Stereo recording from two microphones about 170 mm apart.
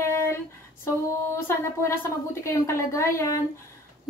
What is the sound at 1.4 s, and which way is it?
Speech, 15° left (ahead or behind).